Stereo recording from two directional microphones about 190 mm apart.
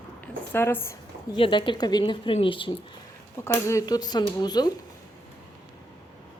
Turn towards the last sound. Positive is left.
turn(degrees=20)  # may be behind; listen again after turning